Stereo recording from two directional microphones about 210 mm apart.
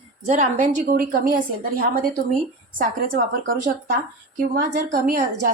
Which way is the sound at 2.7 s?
40° right (ahead or behind).